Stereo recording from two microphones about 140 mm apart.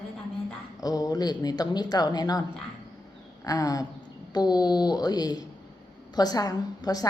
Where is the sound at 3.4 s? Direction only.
25° left (ahead or behind).